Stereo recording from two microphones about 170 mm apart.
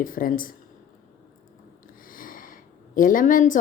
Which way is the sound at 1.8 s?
55° left (ahead or behind).